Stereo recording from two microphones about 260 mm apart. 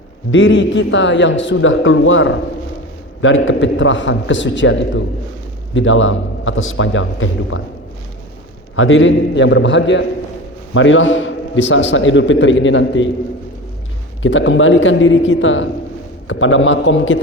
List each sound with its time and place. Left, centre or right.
0.3 s a man's voice: left
8.7 s a man's voice: left
14.2 s a man's voice: left